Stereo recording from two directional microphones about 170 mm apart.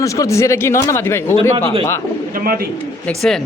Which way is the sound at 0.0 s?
20° left (ahead or behind).